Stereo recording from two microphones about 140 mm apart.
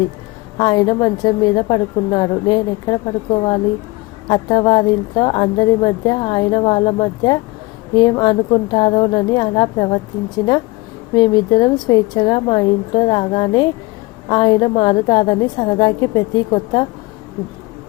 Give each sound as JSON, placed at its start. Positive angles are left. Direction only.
{"t": 0.5, "sound": "a woman's voice", "side_deg": 30}
{"t": 11.1, "sound": "a woman's voice", "side_deg": 30}